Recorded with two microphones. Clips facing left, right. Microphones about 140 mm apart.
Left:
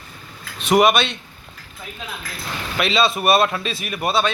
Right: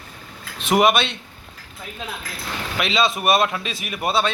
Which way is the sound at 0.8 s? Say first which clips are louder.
Left 1 dB; 25° right (ahead or behind).